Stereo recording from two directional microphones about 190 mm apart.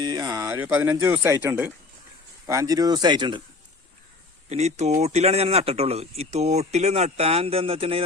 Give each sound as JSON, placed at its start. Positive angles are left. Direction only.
{"t": 0.0, "sound": "speech", "side_deg": -20}
{"t": 4.4, "sound": "a man's voice", "side_deg": -35}